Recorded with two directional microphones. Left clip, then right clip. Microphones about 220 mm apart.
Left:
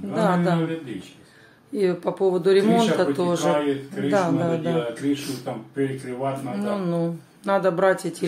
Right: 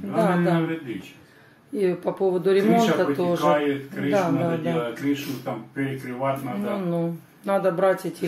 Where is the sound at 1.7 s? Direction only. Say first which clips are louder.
Left 1 dB; 5° left (ahead or behind).